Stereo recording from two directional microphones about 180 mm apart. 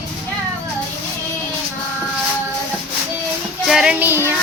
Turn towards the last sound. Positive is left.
turn(degrees=-10)  # may be behind; listen again after turning